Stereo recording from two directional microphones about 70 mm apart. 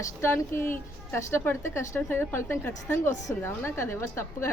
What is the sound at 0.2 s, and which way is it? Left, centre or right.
A woman's voice, left.